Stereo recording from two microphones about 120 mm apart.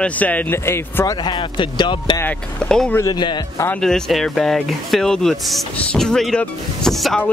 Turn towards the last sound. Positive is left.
turn(degrees=0)  # may be behind; listen again after turning